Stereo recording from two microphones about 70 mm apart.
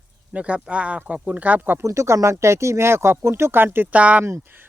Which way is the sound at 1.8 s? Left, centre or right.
Right.